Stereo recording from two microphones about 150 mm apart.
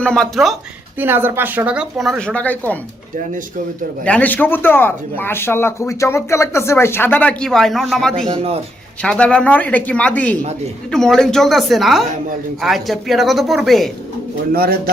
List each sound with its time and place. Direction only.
0.0 s speech: 5° left (ahead or behind)
0.9 s speech: 15° right (ahead or behind); by 2.7 s 10° left (ahead or behind)
4.0 s speech: 10° left (ahead or behind)
8.3 s speech: 40° right (ahead or behind)
9.0 s speech: 5° left (ahead or behind)
14.5 s speech: 90° right